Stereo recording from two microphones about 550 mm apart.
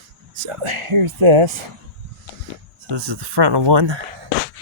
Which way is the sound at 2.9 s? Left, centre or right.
Right.